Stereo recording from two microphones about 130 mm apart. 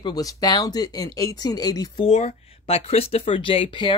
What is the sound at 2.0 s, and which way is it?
Speech, 55° left (ahead or behind).